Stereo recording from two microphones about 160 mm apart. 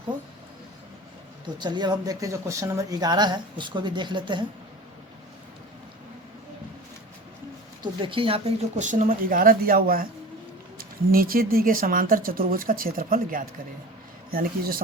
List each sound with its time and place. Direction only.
1.5 s speech: 25° right (ahead or behind)
7.8 s speech: 30° right (ahead or behind); by 14.8 s 70° right (ahead or behind)